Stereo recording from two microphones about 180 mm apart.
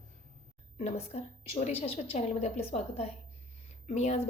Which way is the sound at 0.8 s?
35° left (ahead or behind).